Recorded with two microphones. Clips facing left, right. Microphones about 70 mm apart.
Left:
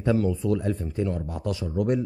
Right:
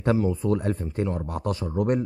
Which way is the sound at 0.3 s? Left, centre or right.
Right.